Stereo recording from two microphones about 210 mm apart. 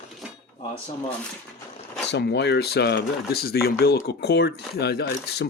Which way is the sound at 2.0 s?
55° left (ahead or behind).